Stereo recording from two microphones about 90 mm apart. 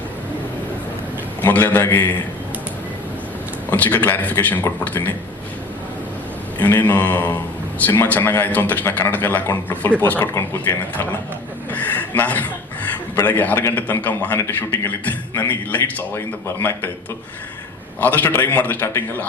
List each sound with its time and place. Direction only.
1.4 s a man's voice: 20° left (ahead or behind)
3.7 s a man's voice: 20° left (ahead or behind)
6.6 s a man's voice: 20° left (ahead or behind)
11.7 s chuckle: 20° left (ahead or behind)
13.2 s a man's voice: 20° left (ahead or behind)
16.1 s a man's voice: 25° left (ahead or behind)
18.0 s a man's voice: 20° left (ahead or behind)